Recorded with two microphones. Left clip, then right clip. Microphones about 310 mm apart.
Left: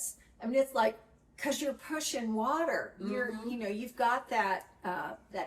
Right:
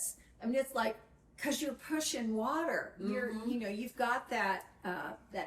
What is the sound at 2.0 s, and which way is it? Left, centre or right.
A woman's voice, centre.